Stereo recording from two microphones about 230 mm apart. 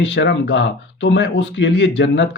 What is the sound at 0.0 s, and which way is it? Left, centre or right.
Speech, left.